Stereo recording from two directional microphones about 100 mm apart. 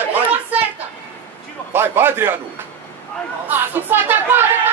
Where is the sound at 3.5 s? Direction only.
20° right (ahead or behind).